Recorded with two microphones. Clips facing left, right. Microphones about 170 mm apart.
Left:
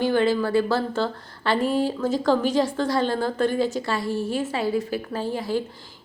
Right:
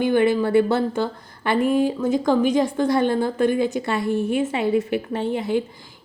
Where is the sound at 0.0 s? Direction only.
20° right (ahead or behind).